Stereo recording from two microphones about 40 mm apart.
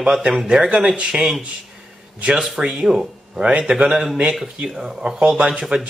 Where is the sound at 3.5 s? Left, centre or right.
Right.